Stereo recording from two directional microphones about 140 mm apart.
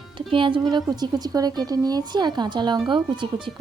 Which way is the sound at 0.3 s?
35° right (ahead or behind).